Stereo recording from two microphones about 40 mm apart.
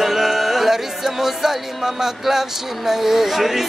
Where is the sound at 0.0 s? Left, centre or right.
Centre.